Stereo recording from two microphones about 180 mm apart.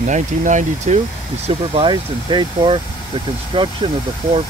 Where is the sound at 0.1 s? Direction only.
40° right (ahead or behind).